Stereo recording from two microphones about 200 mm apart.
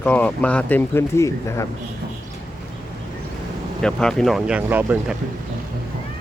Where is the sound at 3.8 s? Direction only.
5° left (ahead or behind).